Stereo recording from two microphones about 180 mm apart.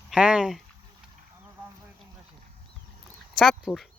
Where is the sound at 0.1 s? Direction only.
5° right (ahead or behind).